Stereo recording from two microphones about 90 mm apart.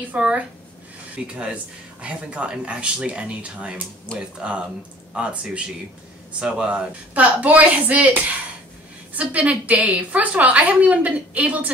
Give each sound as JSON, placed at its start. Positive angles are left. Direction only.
{"t": 0.1, "sound": "speech", "side_deg": -15}